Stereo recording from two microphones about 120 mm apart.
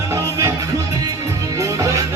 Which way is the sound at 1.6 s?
30° right (ahead or behind).